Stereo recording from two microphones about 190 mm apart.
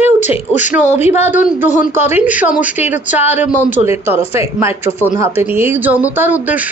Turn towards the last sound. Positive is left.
turn(degrees=-10)  # may be behind; listen again after turning